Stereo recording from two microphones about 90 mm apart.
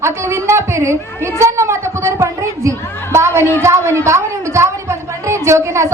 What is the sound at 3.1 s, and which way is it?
A woman's voice, 30° right (ahead or behind).